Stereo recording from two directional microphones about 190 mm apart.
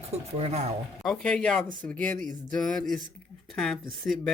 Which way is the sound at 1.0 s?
5° left (ahead or behind).